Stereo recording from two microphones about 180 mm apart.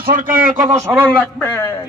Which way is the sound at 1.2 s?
10° left (ahead or behind).